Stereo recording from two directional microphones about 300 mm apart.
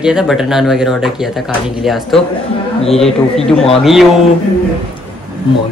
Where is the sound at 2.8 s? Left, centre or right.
Centre.